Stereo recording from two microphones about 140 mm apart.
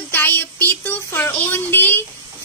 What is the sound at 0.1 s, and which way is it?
Speech, 15° left (ahead or behind).